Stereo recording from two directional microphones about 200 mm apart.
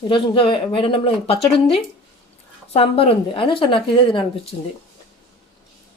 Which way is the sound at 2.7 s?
30° left (ahead or behind).